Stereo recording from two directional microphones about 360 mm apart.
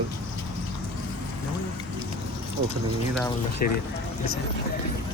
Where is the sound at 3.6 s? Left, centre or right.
Left.